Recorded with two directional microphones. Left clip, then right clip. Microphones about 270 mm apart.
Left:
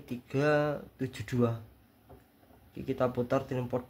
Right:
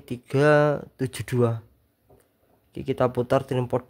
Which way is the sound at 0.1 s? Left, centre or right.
Right.